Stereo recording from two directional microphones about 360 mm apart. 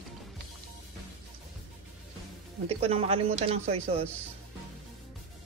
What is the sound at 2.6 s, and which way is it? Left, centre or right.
Speech, centre.